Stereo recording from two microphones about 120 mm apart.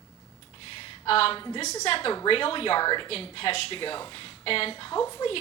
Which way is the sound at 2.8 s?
40° left (ahead or behind).